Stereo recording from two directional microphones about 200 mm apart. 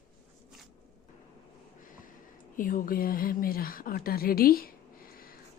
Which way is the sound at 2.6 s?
45° left (ahead or behind).